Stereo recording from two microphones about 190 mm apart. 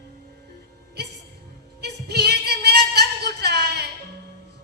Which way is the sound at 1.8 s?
60° right (ahead or behind).